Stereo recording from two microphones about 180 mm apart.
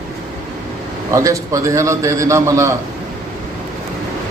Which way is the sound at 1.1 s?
15° right (ahead or behind).